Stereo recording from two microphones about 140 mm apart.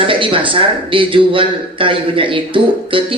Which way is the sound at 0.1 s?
40° right (ahead or behind).